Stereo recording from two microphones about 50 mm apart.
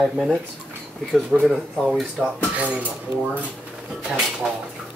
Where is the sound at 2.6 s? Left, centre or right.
Right.